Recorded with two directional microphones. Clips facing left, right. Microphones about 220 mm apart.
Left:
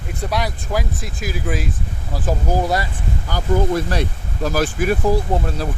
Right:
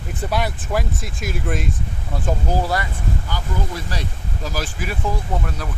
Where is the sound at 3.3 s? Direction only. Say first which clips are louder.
Left 9 dB; 50° left (ahead or behind).